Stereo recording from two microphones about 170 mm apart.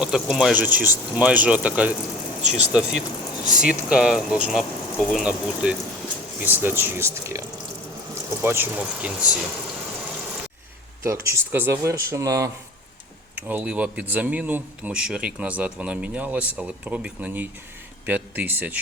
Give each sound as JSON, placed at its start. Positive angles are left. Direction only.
{"t": 0.0, "sound": "speech", "side_deg": -5}
{"t": 11.0, "sound": "speech", "side_deg": -15}